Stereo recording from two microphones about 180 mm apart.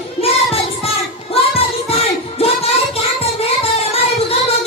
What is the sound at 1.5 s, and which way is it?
Child singing, 35° left (ahead or behind).